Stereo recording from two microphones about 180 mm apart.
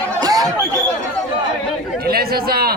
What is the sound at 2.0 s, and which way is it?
Chatter, 60° right (ahead or behind).